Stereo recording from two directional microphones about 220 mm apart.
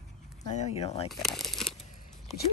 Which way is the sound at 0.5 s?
30° left (ahead or behind).